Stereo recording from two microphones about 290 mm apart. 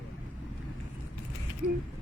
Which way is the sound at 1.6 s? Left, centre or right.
Centre.